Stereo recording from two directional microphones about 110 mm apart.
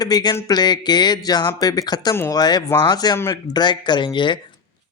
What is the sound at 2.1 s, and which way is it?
Speech, 25° left (ahead or behind).